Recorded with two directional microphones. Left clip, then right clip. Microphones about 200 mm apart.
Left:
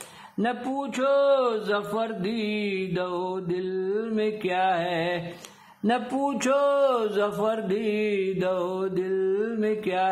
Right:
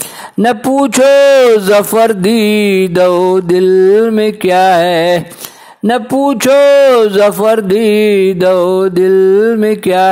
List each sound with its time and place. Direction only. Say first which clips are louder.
0.4 s speech: right 18 dB; 45° right (ahead or behind)